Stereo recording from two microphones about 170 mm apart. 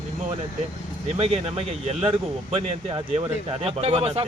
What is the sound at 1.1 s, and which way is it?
Speech, 35° right (ahead or behind).